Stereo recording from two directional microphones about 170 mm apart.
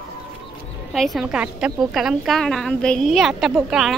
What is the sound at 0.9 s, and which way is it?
A woman's voice, centre (ahead or behind).